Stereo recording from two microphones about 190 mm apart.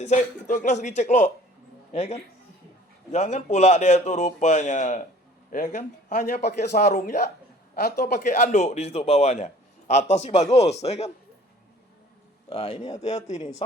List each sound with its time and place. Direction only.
0.0 s a man's voice: 40° left (ahead or behind); by 6.7 s 55° left (ahead or behind)
7.8 s a man's voice: 55° left (ahead or behind); by 11.1 s 35° left (ahead or behind)
12.5 s a man's voice: 30° left (ahead or behind)